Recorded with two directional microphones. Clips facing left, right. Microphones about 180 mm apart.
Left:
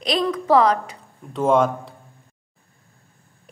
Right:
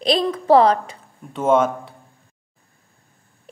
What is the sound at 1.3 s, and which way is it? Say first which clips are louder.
Speech: right 1 dB; centre (ahead or behind).